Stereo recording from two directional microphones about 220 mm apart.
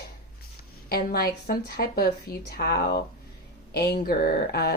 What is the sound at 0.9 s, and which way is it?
Speech, 45° left (ahead or behind).